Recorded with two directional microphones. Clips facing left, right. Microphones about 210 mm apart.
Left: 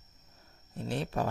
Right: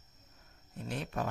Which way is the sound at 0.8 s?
30° left (ahead or behind).